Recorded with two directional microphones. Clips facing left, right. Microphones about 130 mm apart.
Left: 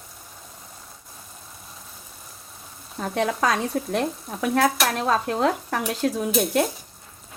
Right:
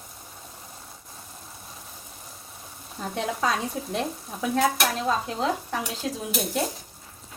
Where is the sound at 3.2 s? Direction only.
70° left (ahead or behind).